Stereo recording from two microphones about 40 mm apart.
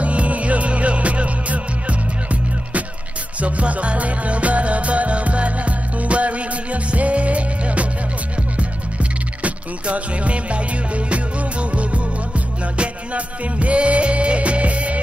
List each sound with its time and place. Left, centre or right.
0.0 s music: right
3.3 s music: right
9.4 s music: right
11.7 s music: right